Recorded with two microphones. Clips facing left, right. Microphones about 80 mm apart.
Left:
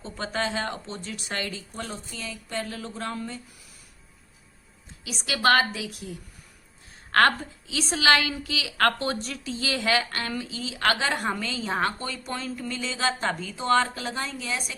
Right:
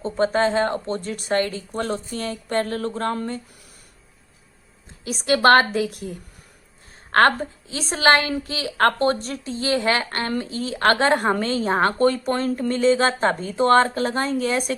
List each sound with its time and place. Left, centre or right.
0.0 s a woman's voice: right
5.0 s a woman's voice: right
7.1 s a woman's voice: right